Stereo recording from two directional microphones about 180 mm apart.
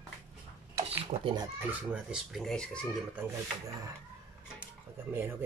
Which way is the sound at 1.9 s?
5° right (ahead or behind).